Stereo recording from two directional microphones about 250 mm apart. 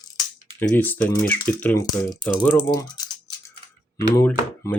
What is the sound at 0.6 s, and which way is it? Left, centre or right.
Speech, centre.